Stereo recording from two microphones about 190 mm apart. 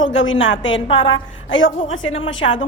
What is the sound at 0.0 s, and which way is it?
Speech, 90° left.